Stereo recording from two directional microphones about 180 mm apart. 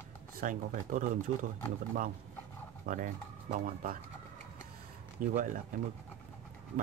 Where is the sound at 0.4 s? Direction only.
45° right (ahead or behind).